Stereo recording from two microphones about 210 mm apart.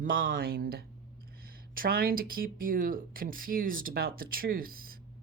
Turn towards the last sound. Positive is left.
turn(degrees=-45)  # may be behind; listen again after turning